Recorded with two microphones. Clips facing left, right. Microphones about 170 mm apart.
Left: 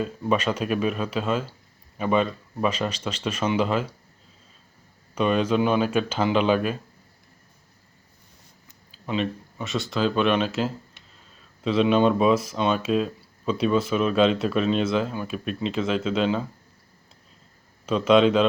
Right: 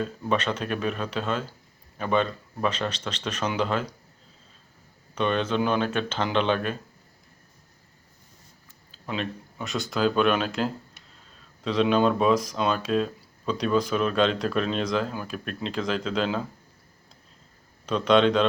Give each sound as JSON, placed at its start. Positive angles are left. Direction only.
{"t": 0.0, "sound": "speech", "side_deg": 10}
{"t": 5.1, "sound": "speech", "side_deg": 10}
{"t": 9.0, "sound": "speech", "side_deg": 0}
{"t": 17.8, "sound": "speech", "side_deg": 5}